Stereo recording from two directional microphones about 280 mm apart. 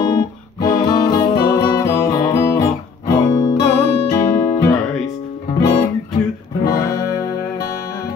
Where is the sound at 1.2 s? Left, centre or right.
Centre.